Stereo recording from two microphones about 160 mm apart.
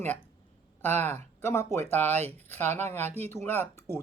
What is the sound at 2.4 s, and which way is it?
Speech, 15° left (ahead or behind).